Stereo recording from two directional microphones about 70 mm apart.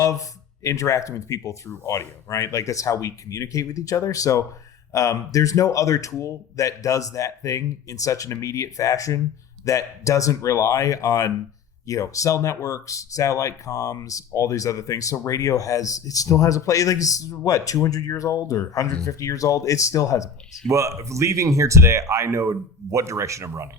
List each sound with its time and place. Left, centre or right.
0.0 s speech: left
1.8 s speech: left
20.7 s speech: right